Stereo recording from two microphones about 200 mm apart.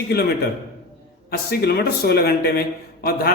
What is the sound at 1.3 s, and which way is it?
A man's voice, 55° left (ahead or behind).